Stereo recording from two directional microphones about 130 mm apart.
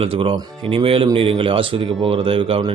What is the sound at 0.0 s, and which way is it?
Speech, 45° right (ahead or behind).